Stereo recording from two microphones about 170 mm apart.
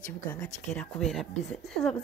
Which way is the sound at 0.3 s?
5° left (ahead or behind).